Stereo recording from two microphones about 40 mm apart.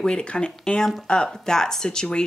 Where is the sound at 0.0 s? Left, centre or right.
Left.